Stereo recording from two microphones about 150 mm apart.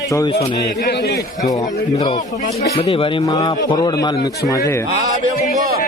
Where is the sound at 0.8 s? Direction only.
90° left.